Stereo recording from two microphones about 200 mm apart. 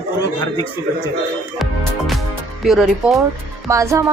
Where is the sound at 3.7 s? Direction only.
15° right (ahead or behind).